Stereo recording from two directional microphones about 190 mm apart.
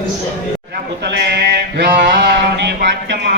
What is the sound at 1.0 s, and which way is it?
Mantra, 60° right (ahead or behind).